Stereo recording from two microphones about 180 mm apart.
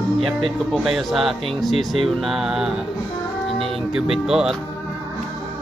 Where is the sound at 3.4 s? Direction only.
Centre (ahead or behind).